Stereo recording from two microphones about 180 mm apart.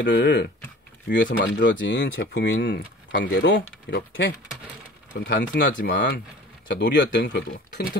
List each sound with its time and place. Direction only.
0.0 s speech: 80° left; by 7.9 s 50° left (ahead or behind)